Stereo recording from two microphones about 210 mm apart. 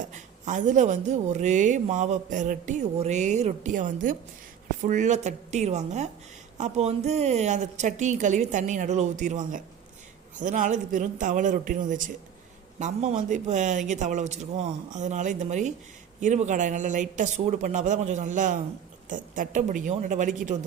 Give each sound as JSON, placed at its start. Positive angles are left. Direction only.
{"t": 0.0, "sound": "a woman's voice", "side_deg": -35}